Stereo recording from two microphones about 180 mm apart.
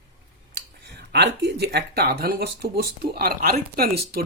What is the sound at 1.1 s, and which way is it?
Speech, 70° right (ahead or behind).